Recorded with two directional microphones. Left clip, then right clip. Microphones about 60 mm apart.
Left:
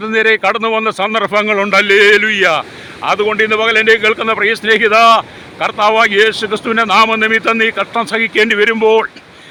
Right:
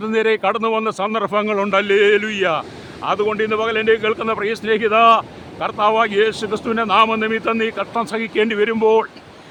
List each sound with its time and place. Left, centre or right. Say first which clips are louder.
0.0 s speech: left 6 dB; centre
0.5 s a man's voice: left 5 dB; left